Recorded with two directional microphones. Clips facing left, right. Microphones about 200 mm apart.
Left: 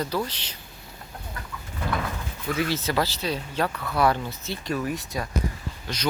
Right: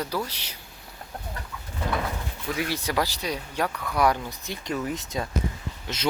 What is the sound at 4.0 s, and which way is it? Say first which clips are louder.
Speech: left 1 dB; 15° right (ahead or behind).